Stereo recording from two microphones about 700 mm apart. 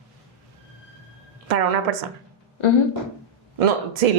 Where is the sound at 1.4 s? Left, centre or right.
Right.